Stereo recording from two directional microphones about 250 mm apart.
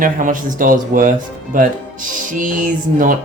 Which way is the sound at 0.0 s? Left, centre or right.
Right.